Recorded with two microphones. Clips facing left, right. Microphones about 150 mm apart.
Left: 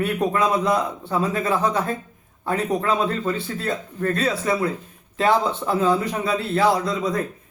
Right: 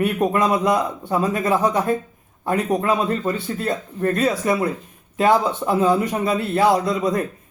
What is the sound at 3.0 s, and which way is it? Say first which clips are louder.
A man's voice: right 2 dB; 20° right (ahead or behind).